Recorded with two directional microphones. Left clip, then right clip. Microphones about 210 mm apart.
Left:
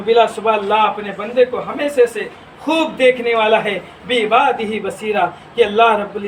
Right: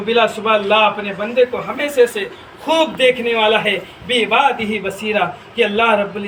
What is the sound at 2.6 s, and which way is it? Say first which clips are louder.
A man's voice: even; 15° left (ahead or behind).